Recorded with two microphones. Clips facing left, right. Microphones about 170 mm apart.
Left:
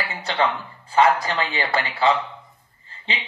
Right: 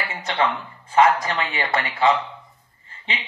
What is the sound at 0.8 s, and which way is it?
Speech, 30° left (ahead or behind).